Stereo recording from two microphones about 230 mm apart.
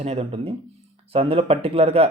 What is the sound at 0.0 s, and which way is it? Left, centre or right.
Speech, right.